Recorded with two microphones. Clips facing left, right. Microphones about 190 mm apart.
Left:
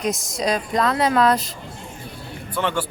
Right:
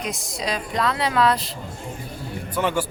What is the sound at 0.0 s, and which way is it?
Speech, 45° left (ahead or behind).